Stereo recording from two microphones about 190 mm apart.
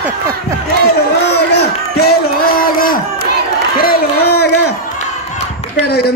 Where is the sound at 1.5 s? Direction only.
55° left (ahead or behind).